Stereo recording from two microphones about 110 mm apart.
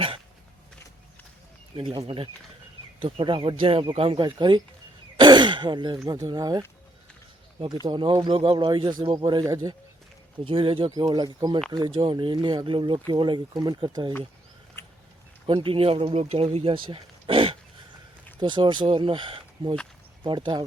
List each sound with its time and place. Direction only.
1.7 s speech: 50° right (ahead or behind)
7.9 s speech: 45° right (ahead or behind)
10.4 s speech: 55° right (ahead or behind)
10.9 s speech: 40° right (ahead or behind)
14.8 s a sound: 25° left (ahead or behind)
15.5 s speech: 55° right (ahead or behind)
16.7 s a sound: 55° right (ahead or behind)
18.3 s speech: 45° right (ahead or behind)